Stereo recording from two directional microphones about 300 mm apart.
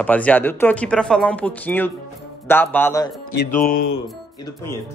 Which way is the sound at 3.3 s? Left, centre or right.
Left.